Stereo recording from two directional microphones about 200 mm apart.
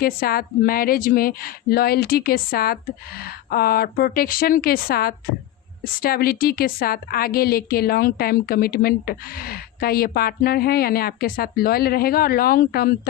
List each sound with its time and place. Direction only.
0.0 s a woman's voice: 50° left (ahead or behind)